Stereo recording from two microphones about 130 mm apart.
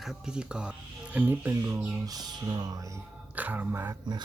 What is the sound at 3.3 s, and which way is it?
Music, 10° right (ahead or behind).